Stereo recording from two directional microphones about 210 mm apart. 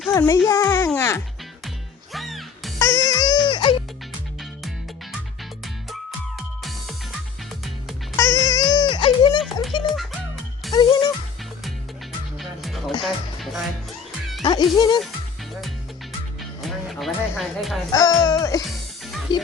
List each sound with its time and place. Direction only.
0.1 s a sound: 15° left (ahead or behind)
0.9 s music: 15° left (ahead or behind)
2.1 s music: centre (ahead or behind)
2.7 s music: 15° left (ahead or behind)
5.6 s music: centre (ahead or behind)
8.1 s music: 15° left (ahead or behind)
9.4 s music: centre (ahead or behind)
10.7 s music: 20° left (ahead or behind)
12.4 s music: centre (ahead or behind)
14.4 s music: 20° left (ahead or behind)
16.4 s music: centre (ahead or behind)
17.9 s music: 15° left (ahead or behind)